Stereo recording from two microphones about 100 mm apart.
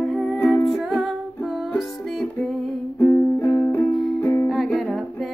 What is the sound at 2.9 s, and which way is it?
Music, 20° left (ahead or behind).